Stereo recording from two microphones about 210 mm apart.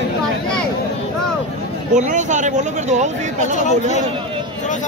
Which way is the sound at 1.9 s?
35° right (ahead or behind).